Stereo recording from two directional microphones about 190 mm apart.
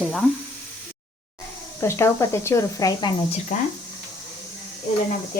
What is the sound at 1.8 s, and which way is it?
Speech, 15° left (ahead or behind).